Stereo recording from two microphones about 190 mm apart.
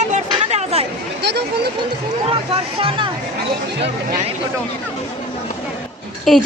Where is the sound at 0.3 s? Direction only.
30° right (ahead or behind).